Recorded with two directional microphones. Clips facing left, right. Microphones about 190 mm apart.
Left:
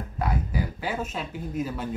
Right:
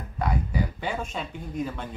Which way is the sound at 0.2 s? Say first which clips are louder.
Right 1 dB; 5° left (ahead or behind).